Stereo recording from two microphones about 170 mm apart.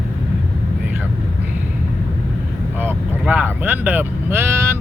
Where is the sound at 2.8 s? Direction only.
10° right (ahead or behind).